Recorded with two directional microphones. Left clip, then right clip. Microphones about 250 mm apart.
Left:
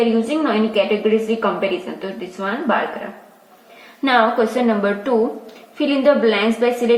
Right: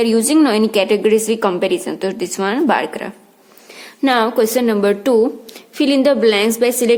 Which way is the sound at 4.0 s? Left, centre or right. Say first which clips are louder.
Right 1 dB; right.